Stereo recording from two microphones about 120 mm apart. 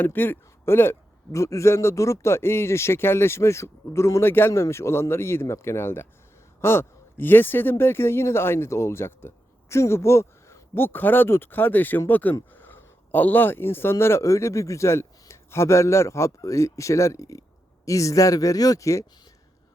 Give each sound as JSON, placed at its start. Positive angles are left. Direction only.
{"t": 0.0, "sound": "a man's voice", "side_deg": 15}